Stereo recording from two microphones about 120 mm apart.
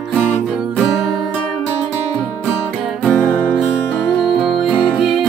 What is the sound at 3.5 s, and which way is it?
Music, 5° right (ahead or behind).